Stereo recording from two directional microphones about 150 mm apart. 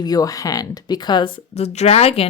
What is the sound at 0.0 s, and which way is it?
Speech, 25° left (ahead or behind).